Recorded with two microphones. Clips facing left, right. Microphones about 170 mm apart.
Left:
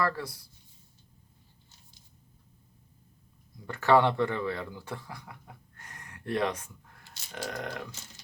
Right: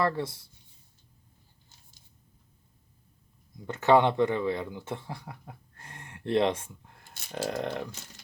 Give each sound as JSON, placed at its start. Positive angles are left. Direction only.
{"t": 0.0, "sound": "speech", "side_deg": -25}
{"t": 3.7, "sound": "speech", "side_deg": -20}
{"t": 5.7, "sound": "gasp", "side_deg": -30}
{"t": 7.3, "sound": "speech", "side_deg": -25}